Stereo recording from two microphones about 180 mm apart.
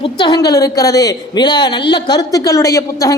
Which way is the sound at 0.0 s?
25° left (ahead or behind).